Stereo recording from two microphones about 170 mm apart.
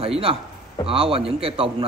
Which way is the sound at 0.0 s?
35° right (ahead or behind).